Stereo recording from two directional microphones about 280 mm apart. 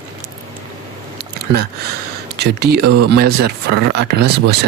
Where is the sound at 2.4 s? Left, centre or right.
Right.